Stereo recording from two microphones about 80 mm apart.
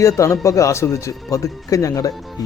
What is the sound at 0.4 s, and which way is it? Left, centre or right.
Speech, left.